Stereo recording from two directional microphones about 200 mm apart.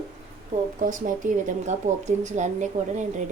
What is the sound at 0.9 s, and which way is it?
A woman's voice, 40° right (ahead or behind).